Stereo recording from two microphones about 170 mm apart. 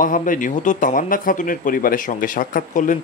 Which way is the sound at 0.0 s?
50° left (ahead or behind).